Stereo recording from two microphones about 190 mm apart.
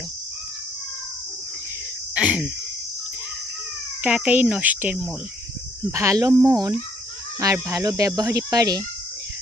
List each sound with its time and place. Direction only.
2.1 s speech: 5° right (ahead or behind)
4.0 s speech: 5° right (ahead or behind)